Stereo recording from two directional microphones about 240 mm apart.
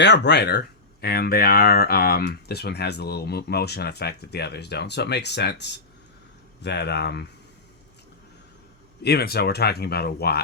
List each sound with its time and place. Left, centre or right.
0.0 s speech: left
9.0 s speech: left